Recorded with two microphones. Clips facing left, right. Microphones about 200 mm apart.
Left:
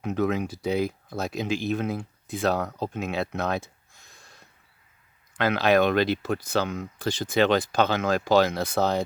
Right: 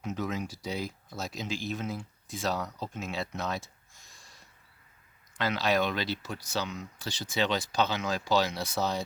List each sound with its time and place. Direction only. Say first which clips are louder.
0.0 s speech: left 8 dB; 60° left (ahead or behind)